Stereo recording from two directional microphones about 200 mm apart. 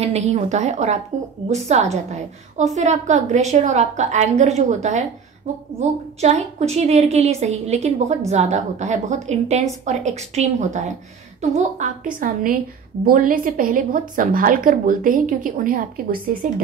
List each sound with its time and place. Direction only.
0.0 s a woman's voice: 35° right (ahead or behind)